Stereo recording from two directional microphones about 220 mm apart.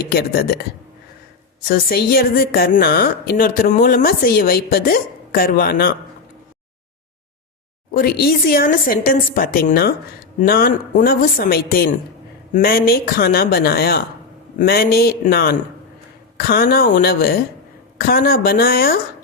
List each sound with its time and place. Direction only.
0.1 s a woman's voice: 45° left (ahead or behind)
1.6 s a woman's voice: 45° left (ahead or behind)
7.9 s a woman's voice: 45° left (ahead or behind)